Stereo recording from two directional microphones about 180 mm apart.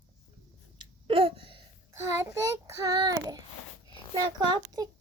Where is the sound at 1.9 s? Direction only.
15° right (ahead or behind).